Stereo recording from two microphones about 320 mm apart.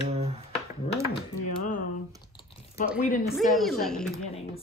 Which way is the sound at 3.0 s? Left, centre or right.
Left.